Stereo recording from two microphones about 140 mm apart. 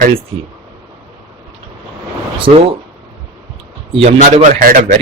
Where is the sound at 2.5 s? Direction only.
65° right (ahead or behind).